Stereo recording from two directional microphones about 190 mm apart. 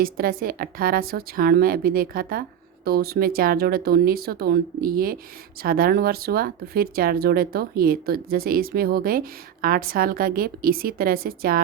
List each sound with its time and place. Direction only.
0.0 s speech: 50° right (ahead or behind)